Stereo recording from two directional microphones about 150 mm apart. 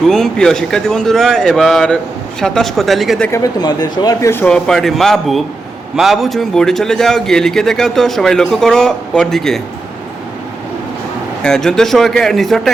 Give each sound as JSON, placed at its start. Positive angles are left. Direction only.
{"t": 0.0, "sound": "a man's voice", "side_deg": 5}
{"t": 3.3, "sound": "a man's voice", "side_deg": 25}
{"t": 11.4, "sound": "a man's voice", "side_deg": 5}